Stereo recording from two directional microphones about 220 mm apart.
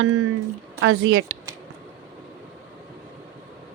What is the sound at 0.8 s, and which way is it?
Speech, 65° right (ahead or behind).